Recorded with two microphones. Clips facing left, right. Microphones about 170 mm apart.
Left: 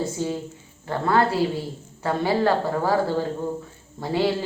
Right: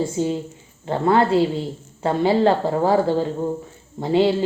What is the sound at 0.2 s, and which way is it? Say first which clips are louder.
A woman's voice: right 5 dB; 20° right (ahead or behind).